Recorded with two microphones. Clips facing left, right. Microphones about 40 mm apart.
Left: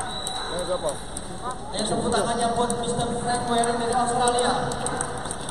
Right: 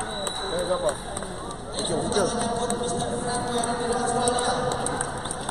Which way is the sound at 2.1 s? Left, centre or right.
Left.